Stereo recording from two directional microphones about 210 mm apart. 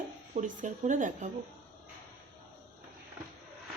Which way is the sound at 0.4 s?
35° right (ahead or behind).